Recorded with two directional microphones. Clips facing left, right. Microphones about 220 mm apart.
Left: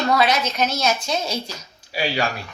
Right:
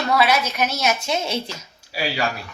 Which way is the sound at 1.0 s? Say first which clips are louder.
Right 1 dB; 20° right (ahead or behind).